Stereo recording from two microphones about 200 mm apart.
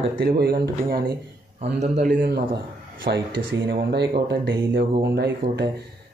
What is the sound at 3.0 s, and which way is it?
Speech, 60° right (ahead or behind).